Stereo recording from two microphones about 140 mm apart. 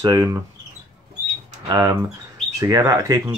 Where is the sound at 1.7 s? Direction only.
30° right (ahead or behind).